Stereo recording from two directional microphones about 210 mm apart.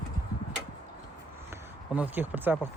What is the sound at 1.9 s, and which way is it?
Speech, 10° right (ahead or behind).